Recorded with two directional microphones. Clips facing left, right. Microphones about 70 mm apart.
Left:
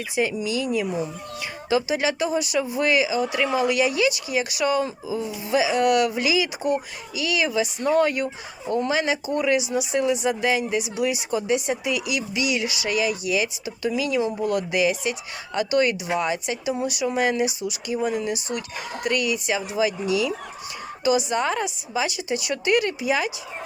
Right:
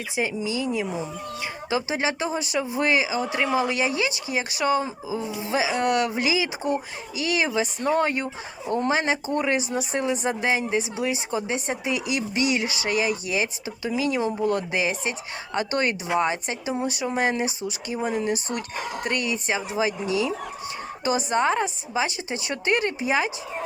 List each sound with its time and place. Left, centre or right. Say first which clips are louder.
0.2 s speech: left 2 dB; right